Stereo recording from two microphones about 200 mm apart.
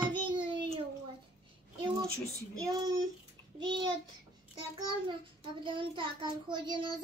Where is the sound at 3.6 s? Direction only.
20° right (ahead or behind).